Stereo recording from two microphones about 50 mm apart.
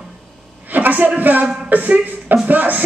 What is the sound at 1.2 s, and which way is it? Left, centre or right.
Speech, right.